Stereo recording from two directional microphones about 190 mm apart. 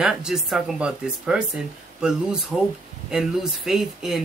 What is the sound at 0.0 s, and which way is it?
Speech, 5° right (ahead or behind).